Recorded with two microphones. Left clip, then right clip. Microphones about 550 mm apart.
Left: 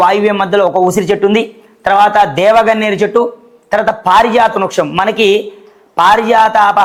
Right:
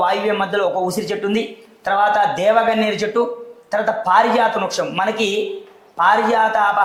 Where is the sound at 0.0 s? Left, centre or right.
Left.